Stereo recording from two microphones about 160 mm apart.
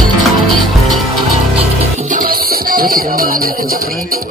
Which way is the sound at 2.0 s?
60° right (ahead or behind).